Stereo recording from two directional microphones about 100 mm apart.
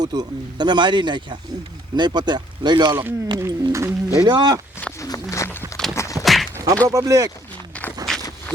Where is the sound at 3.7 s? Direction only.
30° right (ahead or behind).